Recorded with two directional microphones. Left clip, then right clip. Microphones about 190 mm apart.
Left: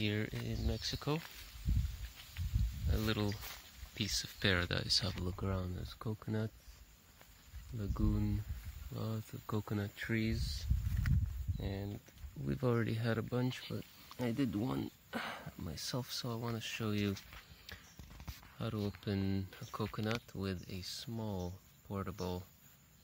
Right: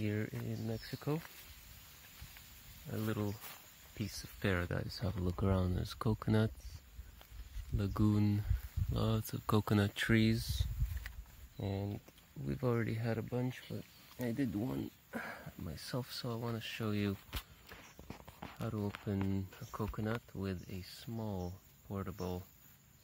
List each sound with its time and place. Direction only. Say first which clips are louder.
0.0 s speech: left 2 dB; 5° left (ahead or behind)
2.9 s speech: left 2 dB; 10° left (ahead or behind)
3.4 s a sound: left 3 dB; 5° left (ahead or behind)
4.4 s speech: left 2 dB; centre (ahead or behind)
5.3 s speech: right 5 dB; 45° right (ahead or behind)
7.7 s speech: right 5 dB; 45° right (ahead or behind)
11.6 s speech: right 3 dB; 30° right (ahead or behind)
12.4 s speech: left 1 dB; 15° left (ahead or behind)
18.6 s speech: left 1 dB; 10° left (ahead or behind)